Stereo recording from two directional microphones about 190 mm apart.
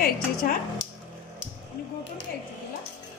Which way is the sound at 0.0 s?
50° left (ahead or behind).